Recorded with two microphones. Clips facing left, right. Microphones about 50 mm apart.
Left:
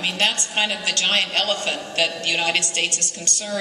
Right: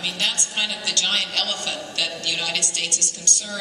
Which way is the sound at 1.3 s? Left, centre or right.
Left.